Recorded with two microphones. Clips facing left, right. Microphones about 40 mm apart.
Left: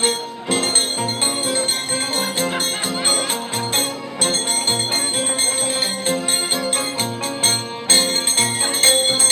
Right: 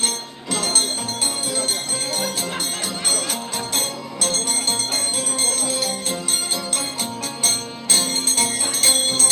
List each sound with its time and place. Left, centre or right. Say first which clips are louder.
0.0 s bell: left 6 dB; left
2.1 s music: left 4 dB; left
3.7 s music: left 3 dB; left